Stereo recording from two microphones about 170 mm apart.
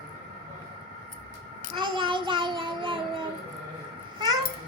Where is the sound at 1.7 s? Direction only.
30° right (ahead or behind).